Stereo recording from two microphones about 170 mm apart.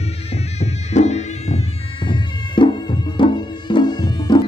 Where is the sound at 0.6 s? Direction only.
40° left (ahead or behind).